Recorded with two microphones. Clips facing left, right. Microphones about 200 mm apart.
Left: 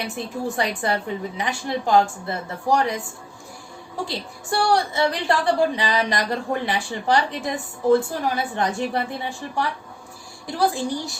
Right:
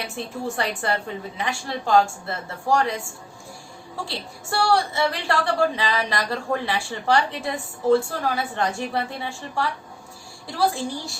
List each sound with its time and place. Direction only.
0.8 s a woman's voice: 15° left (ahead or behind)
4.0 s a woman's voice: 20° left (ahead or behind)